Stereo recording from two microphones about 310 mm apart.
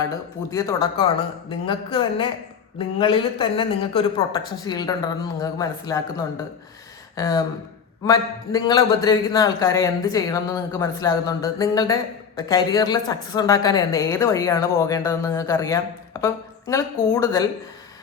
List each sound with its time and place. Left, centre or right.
0.5 s a woman's voice: centre